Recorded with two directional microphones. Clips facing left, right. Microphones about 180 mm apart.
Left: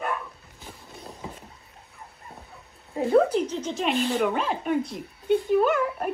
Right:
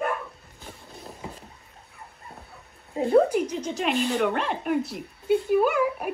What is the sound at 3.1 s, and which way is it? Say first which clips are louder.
Speech: right 1 dB; 10° right (ahead or behind).